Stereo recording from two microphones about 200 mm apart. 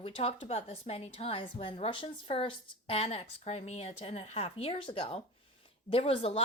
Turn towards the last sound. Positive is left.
turn(degrees=30)  # may be behind; listen again after turning